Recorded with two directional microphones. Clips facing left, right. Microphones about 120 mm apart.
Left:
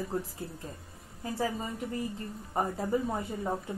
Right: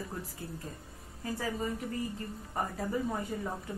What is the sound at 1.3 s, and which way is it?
Speech, 30° left (ahead or behind).